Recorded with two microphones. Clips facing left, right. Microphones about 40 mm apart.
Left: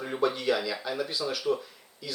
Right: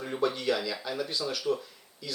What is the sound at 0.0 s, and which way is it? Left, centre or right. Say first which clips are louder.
Speech: left 2 dB; centre.